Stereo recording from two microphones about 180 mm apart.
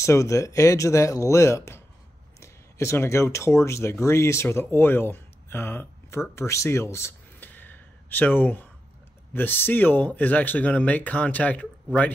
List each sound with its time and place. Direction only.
0.0 s speech: 15° left (ahead or behind)